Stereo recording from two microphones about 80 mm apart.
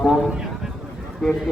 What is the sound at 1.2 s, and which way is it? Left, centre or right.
Speech, centre.